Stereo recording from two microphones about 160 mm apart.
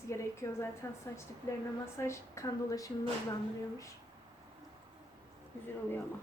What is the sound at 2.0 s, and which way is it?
Speech, 20° left (ahead or behind).